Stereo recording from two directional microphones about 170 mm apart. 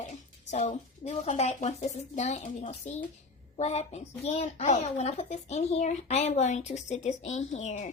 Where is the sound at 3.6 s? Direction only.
40° left (ahead or behind).